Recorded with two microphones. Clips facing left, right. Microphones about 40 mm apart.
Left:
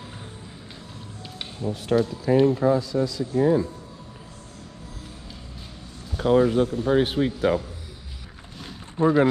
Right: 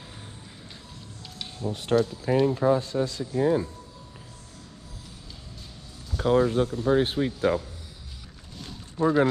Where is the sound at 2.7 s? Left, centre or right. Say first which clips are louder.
Left 3 dB; right.